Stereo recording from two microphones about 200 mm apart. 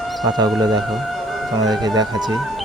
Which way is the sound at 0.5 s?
20° right (ahead or behind).